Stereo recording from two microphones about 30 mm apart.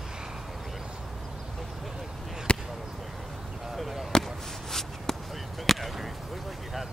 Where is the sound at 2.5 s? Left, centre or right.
Left.